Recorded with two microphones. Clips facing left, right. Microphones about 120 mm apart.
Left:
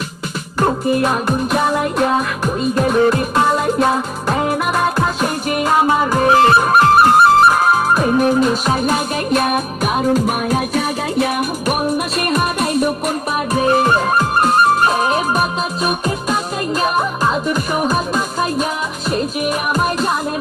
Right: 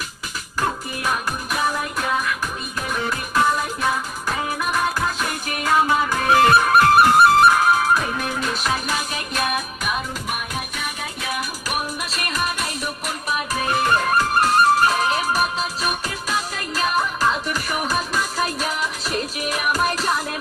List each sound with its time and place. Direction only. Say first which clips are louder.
0.6 s music: left 10 dB; 30° left (ahead or behind); by 11.8 s 55° left (ahead or behind)
12.2 s music: left 5 dB; 30° left (ahead or behind)
13.9 s music: left 4 dB; 15° left (ahead or behind)